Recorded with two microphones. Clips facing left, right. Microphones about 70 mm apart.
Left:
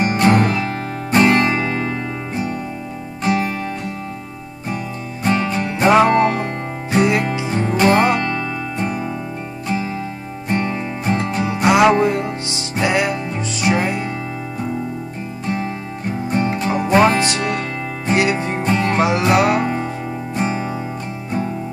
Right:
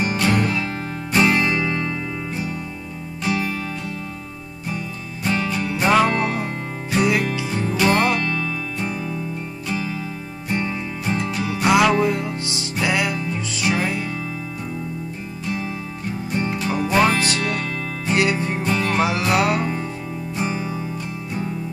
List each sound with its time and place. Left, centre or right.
0.0 s music: left
1.3 s music: left
3.3 s music: left
5.2 s music: left
6.9 s music: left
13.3 s music: centre
15.4 s music: left
18.6 s music: left
18.9 s music: centre
19.4 s music: left